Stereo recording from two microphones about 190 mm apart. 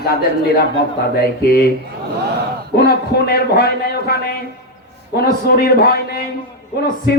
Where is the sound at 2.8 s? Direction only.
55° left (ahead or behind).